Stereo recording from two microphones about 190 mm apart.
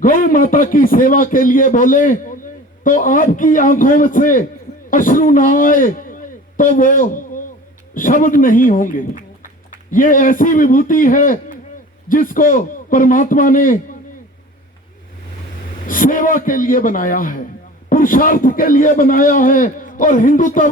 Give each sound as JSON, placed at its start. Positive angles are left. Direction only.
{"t": 0.0, "sound": "a man's voice", "side_deg": 45}
{"t": 15.9, "sound": "a man's voice", "side_deg": 45}